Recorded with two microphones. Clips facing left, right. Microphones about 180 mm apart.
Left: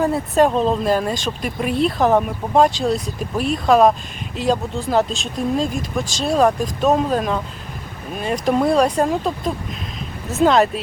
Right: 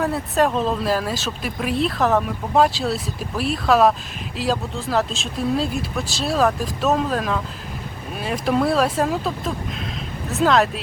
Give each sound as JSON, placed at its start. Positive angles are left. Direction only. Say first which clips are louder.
{"t": 0.0, "sound": "speech", "louder": "left 4 dB", "side_deg": 0}
{"t": 0.5, "sound": "speech", "louder": "left 4 dB", "side_deg": 25}
{"t": 0.9, "sound": "speech", "louder": "left 3 dB", "side_deg": -5}